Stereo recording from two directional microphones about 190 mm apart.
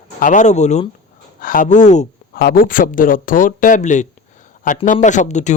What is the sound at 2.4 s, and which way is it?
Speech, 50° left (ahead or behind).